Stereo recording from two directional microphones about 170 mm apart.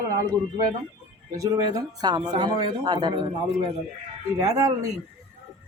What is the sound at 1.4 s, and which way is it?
Speech, 20° right (ahead or behind).